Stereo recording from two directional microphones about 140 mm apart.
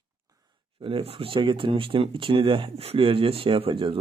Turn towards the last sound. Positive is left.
turn(degrees=-40)  # may be behind; listen again after turning